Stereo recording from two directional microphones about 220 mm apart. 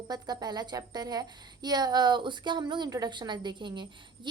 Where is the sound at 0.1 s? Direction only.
20° right (ahead or behind).